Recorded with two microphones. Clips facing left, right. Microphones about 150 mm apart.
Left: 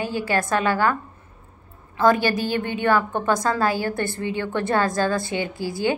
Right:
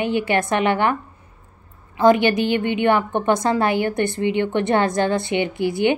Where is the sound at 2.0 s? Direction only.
20° right (ahead or behind).